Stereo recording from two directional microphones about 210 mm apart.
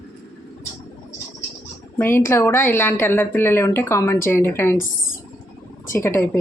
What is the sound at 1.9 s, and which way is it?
A woman's voice, 10° left (ahead or behind).